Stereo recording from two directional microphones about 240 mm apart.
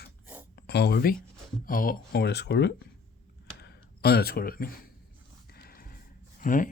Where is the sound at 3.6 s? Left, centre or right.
Left.